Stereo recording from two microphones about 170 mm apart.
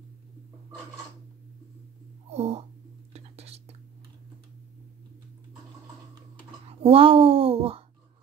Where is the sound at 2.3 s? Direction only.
40° right (ahead or behind).